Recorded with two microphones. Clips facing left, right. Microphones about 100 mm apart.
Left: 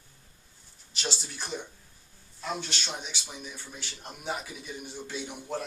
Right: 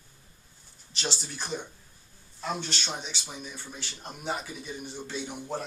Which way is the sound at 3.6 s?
5° left (ahead or behind).